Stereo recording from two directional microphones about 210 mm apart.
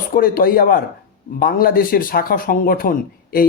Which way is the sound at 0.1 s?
45° left (ahead or behind).